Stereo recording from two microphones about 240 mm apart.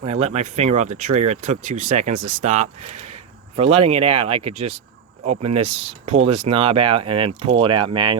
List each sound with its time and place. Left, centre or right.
0.0 s speech: right